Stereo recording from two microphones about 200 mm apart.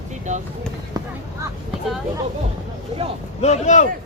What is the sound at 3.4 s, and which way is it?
Speech, 35° left (ahead or behind).